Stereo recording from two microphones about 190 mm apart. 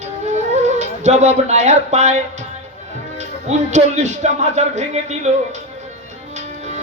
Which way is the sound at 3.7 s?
40° right (ahead or behind).